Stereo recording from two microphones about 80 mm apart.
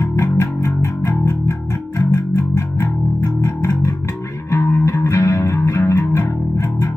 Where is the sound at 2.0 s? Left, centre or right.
Left.